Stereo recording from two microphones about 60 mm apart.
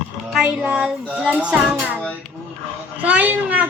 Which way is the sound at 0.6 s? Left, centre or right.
Right.